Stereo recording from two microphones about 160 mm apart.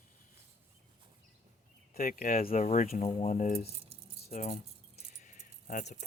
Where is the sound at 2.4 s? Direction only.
40° left (ahead or behind).